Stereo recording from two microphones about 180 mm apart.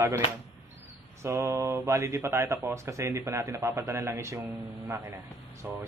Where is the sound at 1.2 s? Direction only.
15° right (ahead or behind).